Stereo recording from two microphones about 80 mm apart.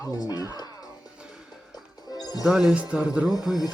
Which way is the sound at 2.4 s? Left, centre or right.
Centre.